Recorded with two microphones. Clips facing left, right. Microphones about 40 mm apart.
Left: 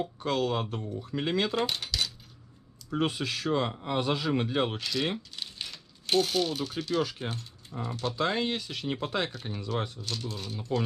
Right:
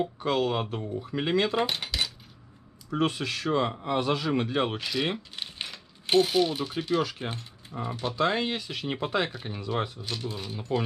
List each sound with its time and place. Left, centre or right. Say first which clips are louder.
0.0 s cutlery: right 3 dB; centre
2.9 s cutlery: right 2 dB; centre
3.8 s a man's voice: right 2 dB; centre
7.0 s cutlery: right 1 dB; centre
7.2 s speech: right 1 dB; right
8.2 s cutlery: right 3 dB; centre